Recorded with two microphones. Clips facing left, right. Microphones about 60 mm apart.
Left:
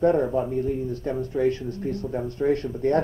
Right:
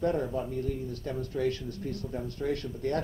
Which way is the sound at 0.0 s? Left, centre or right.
Left.